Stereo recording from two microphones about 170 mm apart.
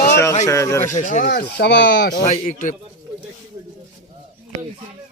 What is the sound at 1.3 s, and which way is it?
Speech, 80° left.